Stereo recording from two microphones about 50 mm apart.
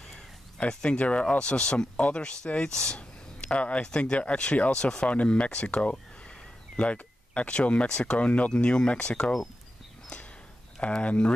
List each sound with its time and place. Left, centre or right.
0.7 s speech: left
3.0 s a sound: left
3.8 s speech: centre
10.8 s speech: left